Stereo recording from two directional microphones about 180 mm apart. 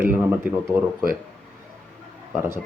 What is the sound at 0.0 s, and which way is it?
Speech, 10° right (ahead or behind).